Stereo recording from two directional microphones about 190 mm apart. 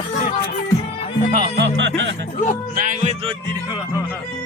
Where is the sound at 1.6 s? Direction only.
70° right (ahead or behind).